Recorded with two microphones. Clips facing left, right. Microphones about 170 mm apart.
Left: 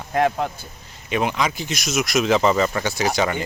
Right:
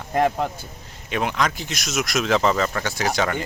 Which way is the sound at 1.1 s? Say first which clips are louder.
Left 1 dB; 5° left (ahead or behind).